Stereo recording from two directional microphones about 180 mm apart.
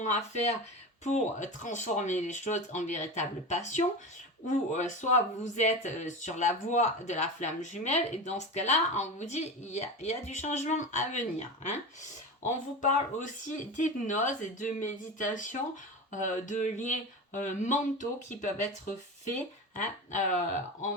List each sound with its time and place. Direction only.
0.0 s speech: 40° left (ahead or behind)